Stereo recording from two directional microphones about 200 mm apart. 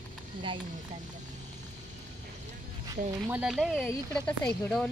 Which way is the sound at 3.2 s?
5° right (ahead or behind).